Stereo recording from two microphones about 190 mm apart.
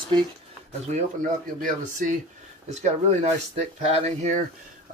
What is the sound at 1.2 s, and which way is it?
Speech, 45° right (ahead or behind).